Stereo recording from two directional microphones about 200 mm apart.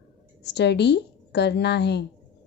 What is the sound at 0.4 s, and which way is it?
Speech, 60° left (ahead or behind).